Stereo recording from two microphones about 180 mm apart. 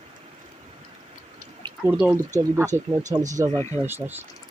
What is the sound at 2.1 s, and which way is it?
Speech, 15° right (ahead or behind).